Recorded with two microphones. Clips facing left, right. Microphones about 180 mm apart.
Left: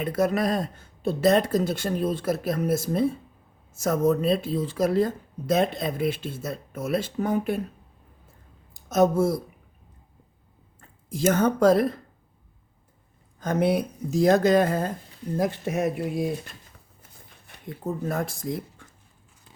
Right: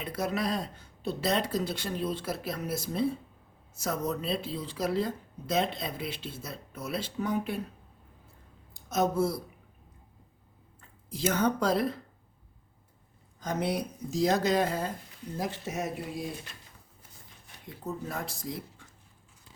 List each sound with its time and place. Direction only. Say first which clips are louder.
0.0 s speech: left 8 dB; 50° left (ahead or behind)
8.9 s speech: left 7 dB; 45° left (ahead or behind)
10.8 s speech: left 7 dB; 50° left (ahead or behind)
13.4 s speech: left 8 dB; 55° left (ahead or behind)